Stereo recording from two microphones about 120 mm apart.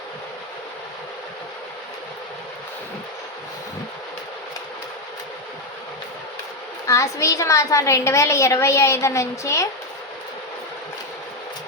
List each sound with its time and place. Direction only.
6.8 s a woman's voice: 25° left (ahead or behind)